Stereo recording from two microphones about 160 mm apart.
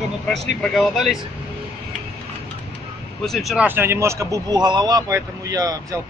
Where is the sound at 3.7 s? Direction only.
15° right (ahead or behind).